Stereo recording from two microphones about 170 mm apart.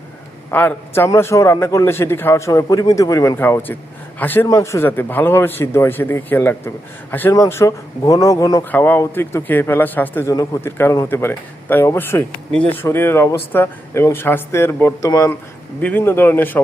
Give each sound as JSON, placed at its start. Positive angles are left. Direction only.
{"t": 0.5, "sound": "speech", "side_deg": 10}